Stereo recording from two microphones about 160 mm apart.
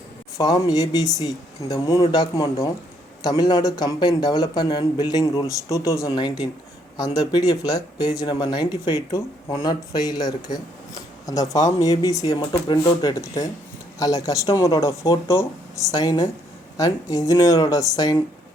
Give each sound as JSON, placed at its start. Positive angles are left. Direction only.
{"t": 0.3, "sound": "a man's voice", "side_deg": 25}